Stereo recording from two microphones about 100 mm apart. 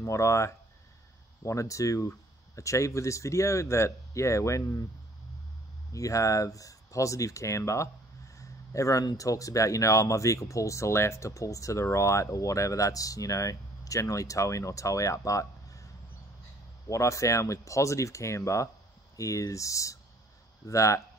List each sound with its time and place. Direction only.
0.0 s speech: 30° left (ahead or behind)
5.9 s speech: 35° left (ahead or behind)
16.9 s speech: 30° left (ahead or behind)